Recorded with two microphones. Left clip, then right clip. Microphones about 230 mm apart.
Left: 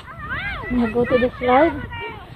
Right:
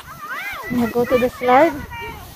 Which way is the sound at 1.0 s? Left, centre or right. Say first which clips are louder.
Right 1 dB; right.